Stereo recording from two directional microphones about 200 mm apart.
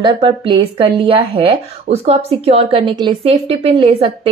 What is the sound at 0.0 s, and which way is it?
A woman's voice, 25° right (ahead or behind).